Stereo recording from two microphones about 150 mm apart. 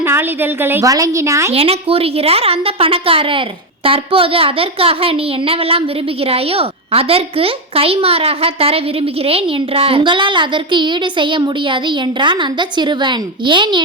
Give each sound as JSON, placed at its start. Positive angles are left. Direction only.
{"t": 0.0, "sound": "a woman's voice", "side_deg": -15}
{"t": 1.5, "sound": "a woman's voice", "side_deg": -40}